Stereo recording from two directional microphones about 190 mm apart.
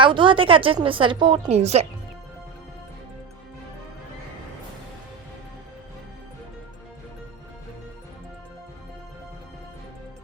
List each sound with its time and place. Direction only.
0.0 s a woman's voice: 25° right (ahead or behind)